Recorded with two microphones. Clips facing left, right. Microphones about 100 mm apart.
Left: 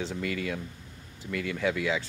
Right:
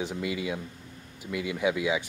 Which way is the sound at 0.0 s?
15° right (ahead or behind).